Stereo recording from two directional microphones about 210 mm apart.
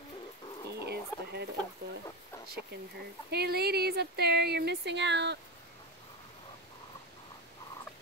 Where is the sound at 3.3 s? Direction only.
50° right (ahead or behind).